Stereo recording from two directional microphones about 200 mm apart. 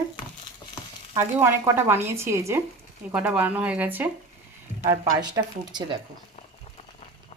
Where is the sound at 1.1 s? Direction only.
10° right (ahead or behind).